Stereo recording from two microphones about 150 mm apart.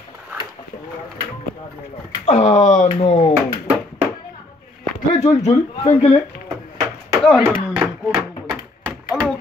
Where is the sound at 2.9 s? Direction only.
40° left (ahead or behind).